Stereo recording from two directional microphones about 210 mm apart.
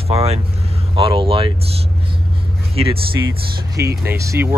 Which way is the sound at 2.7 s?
30° right (ahead or behind).